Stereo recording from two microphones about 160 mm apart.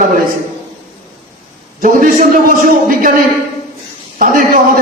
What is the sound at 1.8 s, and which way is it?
A man's voice, 55° right (ahead or behind).